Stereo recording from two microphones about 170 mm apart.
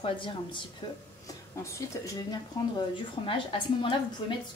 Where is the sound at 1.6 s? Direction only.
20° left (ahead or behind).